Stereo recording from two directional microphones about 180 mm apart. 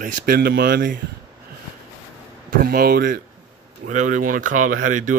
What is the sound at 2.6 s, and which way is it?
Speech, 55° right (ahead or behind).